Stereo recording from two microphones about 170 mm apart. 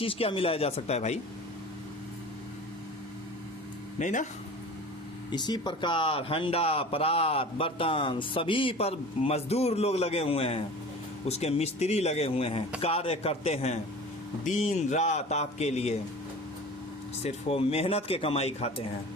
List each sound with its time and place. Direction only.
0.0 s speech: 30° left (ahead or behind)
3.9 s speech: 45° left (ahead or behind)
5.3 s speech: 25° left (ahead or behind)
14.4 s speech: 45° left (ahead or behind)
17.2 s speech: 35° left (ahead or behind)